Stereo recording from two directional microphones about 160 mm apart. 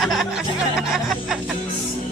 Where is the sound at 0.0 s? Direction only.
Centre (ahead or behind).